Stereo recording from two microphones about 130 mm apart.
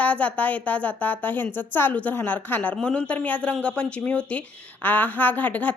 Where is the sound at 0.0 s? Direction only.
10° left (ahead or behind).